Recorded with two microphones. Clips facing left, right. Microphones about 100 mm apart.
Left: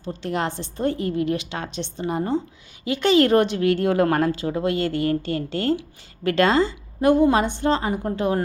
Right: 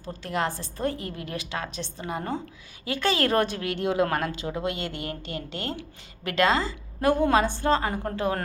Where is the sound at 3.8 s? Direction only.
45° left (ahead or behind).